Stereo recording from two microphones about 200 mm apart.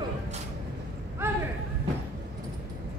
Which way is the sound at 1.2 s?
10° right (ahead or behind).